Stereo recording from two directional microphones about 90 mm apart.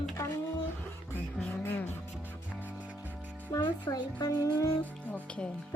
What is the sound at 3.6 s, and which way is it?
Speech, 55° left (ahead or behind).